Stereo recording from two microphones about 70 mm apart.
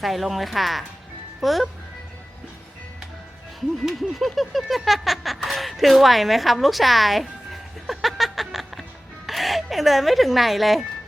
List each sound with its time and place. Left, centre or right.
0.0 s a child's voice: centre
3.8 s a sound: centre
9.2 s speech: centre